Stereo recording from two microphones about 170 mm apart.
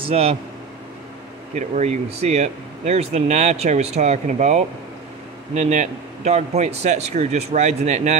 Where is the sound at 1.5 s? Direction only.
45° right (ahead or behind).